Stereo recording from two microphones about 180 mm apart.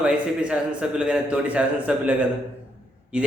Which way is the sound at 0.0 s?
5° right (ahead or behind).